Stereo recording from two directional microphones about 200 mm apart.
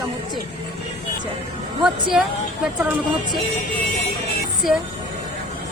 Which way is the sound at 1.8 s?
5° right (ahead or behind).